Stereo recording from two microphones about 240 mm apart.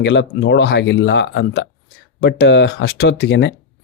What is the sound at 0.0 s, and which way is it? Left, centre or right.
Speech, left.